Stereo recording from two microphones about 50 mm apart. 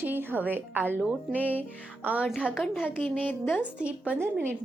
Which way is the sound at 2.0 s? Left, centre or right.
Right.